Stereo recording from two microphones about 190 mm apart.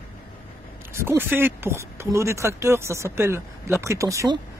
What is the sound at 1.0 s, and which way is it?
Speech, 10° right (ahead or behind).